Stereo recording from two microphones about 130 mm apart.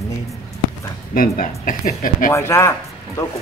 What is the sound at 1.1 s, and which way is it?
Speech, 90° left.